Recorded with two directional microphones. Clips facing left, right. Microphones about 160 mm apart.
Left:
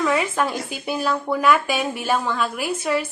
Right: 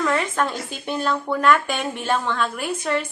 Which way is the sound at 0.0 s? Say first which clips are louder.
Left 1 dB; 5° left (ahead or behind).